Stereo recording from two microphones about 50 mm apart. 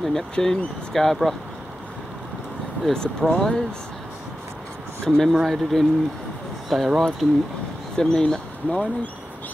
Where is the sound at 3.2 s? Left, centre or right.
Centre.